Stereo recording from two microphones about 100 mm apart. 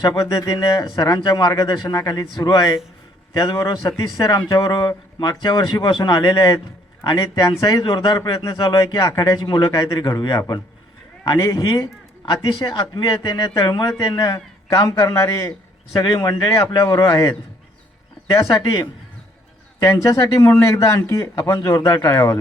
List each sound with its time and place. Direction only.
0.2 s a man's voice: 35° left (ahead or behind)
16.0 s a man's voice: 40° left (ahead or behind)